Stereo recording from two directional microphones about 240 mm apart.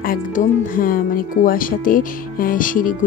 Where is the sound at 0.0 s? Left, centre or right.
Left.